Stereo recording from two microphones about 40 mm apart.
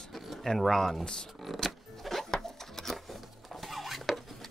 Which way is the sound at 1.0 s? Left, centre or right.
Centre.